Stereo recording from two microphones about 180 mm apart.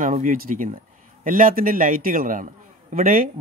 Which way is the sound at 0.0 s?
45° right (ahead or behind).